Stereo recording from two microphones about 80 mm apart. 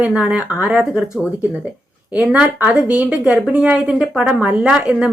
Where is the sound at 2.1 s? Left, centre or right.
Centre.